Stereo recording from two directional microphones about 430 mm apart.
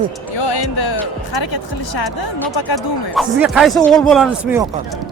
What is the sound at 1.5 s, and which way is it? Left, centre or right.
Speech, left.